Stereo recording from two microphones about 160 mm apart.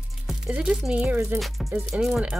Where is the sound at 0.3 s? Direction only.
5° right (ahead or behind).